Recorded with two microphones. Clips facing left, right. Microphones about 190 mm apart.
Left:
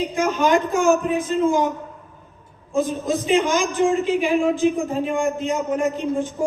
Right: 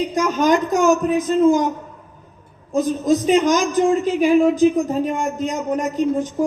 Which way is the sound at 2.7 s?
40° right (ahead or behind).